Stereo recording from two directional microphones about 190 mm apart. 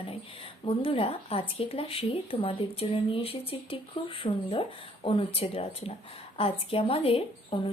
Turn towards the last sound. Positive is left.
turn(degrees=30)  # may be behind; listen again after turning